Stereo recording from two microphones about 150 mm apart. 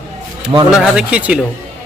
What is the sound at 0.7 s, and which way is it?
Speech, 5° right (ahead or behind).